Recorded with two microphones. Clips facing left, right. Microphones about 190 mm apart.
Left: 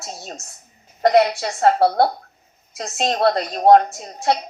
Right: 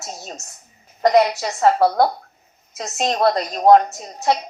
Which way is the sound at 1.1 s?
55° left (ahead or behind).